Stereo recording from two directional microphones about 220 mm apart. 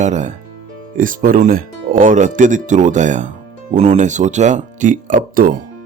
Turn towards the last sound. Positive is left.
turn(degrees=-40)  # may be behind; listen again after turning